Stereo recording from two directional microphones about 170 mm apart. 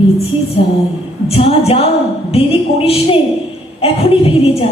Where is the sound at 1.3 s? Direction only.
35° left (ahead or behind).